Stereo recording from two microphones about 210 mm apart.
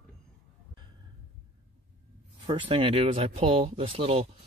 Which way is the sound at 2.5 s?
25° right (ahead or behind).